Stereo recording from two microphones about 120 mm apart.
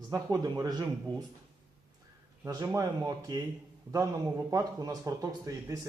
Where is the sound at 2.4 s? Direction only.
30° right (ahead or behind).